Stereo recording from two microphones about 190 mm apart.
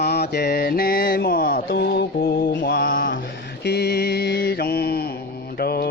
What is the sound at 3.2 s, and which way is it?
Mantra, 60° left (ahead or behind).